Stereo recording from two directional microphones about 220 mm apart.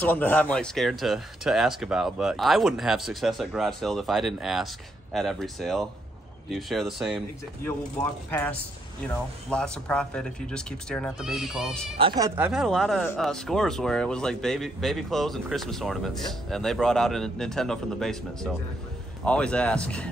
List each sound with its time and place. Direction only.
0.0 s speech: 5° left (ahead or behind)
7.6 s speech: 10° left (ahead or behind)
12.0 s speech: 20° right (ahead or behind)
12.4 s speech: 5° right (ahead or behind)